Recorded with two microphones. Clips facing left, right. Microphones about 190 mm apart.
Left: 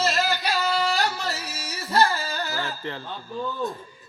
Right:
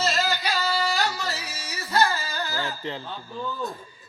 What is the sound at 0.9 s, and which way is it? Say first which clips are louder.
Singing: left 1 dB; 60° left (ahead or behind).